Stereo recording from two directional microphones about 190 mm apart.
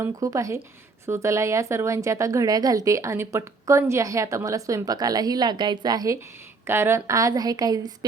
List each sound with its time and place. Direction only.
0.0 s a woman's voice: 15° right (ahead or behind)